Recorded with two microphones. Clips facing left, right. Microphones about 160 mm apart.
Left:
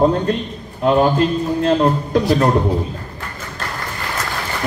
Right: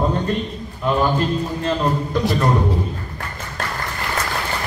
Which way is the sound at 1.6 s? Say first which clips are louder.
Left 5 dB; 65° left (ahead or behind).